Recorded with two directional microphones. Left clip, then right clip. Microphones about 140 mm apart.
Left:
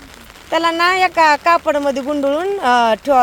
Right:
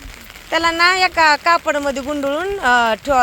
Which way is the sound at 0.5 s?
25° left (ahead or behind).